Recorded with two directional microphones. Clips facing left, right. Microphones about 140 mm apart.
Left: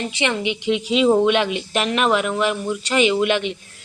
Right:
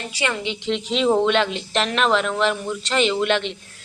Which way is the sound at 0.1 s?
20° left (ahead or behind).